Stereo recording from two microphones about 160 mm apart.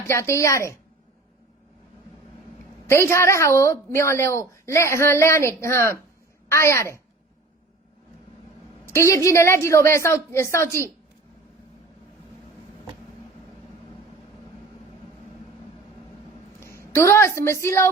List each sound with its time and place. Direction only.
0.1 s a woman's voice: 15° left (ahead or behind)
2.8 s a woman's voice: 15° left (ahead or behind)
8.9 s a woman's voice: 20° left (ahead or behind)
16.6 s a woman's voice: 15° left (ahead or behind)